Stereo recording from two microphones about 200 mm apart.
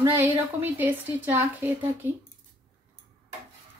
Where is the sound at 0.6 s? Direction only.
10° right (ahead or behind).